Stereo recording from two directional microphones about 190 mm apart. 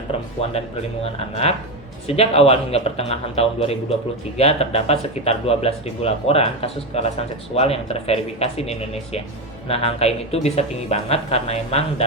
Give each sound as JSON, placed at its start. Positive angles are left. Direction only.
{"t": 1.0, "sound": "speech", "side_deg": 35}